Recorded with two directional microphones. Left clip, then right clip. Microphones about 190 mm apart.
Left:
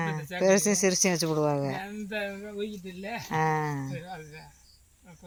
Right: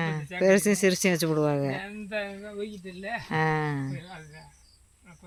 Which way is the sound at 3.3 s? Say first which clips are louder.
Even; 25° right (ahead or behind).